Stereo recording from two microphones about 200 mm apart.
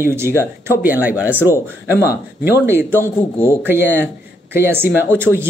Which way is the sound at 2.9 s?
15° left (ahead or behind).